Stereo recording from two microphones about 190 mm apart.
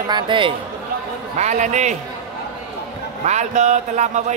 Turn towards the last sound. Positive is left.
turn(degrees=-40)  # may be behind; listen again after turning